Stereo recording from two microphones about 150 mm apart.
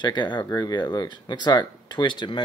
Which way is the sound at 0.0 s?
30° left (ahead or behind).